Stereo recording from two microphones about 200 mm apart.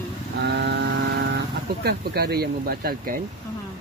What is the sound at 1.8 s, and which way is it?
Speech, 55° right (ahead or behind).